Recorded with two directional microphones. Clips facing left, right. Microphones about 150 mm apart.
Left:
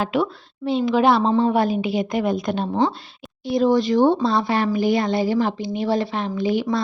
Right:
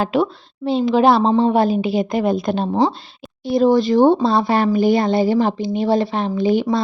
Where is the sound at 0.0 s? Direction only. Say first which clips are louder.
Right 3 dB; 30° right (ahead or behind).